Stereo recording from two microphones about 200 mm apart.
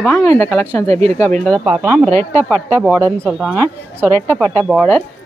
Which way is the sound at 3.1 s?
10° right (ahead or behind).